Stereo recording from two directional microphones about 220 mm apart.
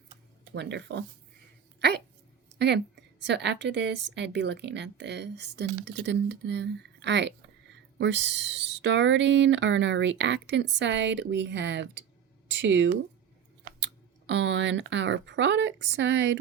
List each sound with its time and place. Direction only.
0.5 s a woman's voice: 50° right (ahead or behind)
2.6 s a woman's voice: 50° right (ahead or behind)